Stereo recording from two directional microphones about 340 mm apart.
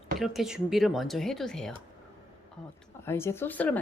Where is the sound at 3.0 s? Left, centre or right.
Centre.